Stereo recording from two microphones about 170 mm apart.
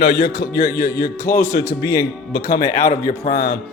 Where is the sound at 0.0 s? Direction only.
70° left (ahead or behind).